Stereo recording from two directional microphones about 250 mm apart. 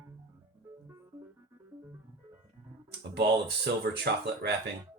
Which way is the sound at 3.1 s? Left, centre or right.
Right.